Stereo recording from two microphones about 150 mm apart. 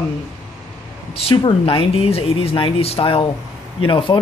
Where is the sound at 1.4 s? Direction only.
35° left (ahead or behind).